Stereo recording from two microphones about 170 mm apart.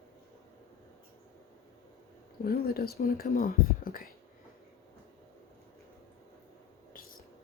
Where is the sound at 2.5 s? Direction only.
65° left (ahead or behind).